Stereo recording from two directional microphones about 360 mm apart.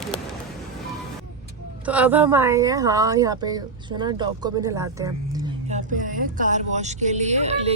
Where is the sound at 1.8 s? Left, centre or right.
Centre.